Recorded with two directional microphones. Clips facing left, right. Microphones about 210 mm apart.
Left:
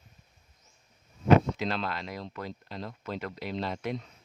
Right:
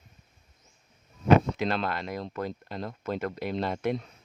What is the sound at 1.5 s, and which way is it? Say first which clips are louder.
Speech: right 3 dB; 55° right (ahead or behind).